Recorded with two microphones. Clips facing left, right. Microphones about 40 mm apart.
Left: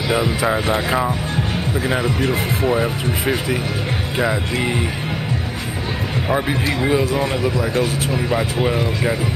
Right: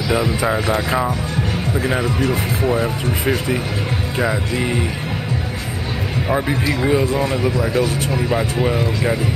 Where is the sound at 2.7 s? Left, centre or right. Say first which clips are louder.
Even; centre.